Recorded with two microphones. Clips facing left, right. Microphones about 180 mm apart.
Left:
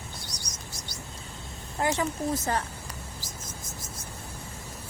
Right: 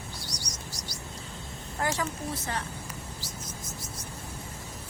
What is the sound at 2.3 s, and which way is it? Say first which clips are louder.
Speech: left 6 dB; 45° left (ahead or behind).